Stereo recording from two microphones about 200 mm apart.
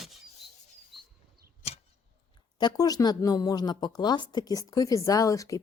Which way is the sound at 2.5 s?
20° left (ahead or behind).